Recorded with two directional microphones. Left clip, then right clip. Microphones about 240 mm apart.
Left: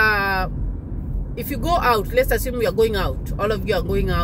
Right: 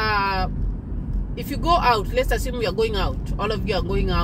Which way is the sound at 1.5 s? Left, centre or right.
Centre.